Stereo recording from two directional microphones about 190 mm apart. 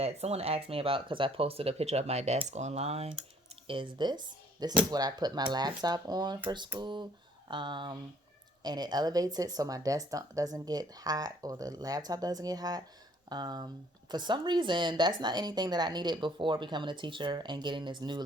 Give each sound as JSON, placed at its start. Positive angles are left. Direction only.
{"t": 0.0, "sound": "speech", "side_deg": -35}